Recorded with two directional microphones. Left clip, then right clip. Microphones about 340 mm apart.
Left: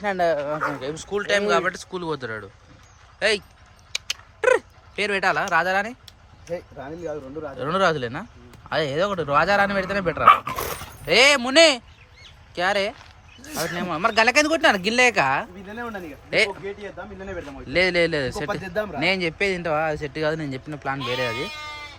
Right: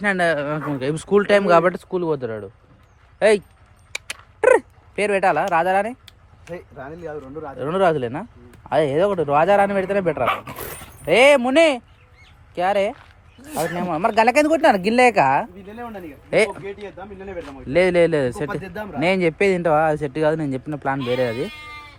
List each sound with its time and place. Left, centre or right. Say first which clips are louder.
0.0 s speech: right 2 dB; right
3.9 s a sound: left 2 dB; centre
6.7 s speech: even; right
7.5 s speech: right 3 dB; centre
10.2 s speech: left 8 dB; centre
11.0 s speech: right 3 dB; centre
15.8 s speech: left 1 dB; centre
16.3 s speech: right 3 dB; centre
17.7 s speech: right 4 dB; centre
18.6 s speech: left 5 dB; centre
18.9 s speech: right 6 dB; centre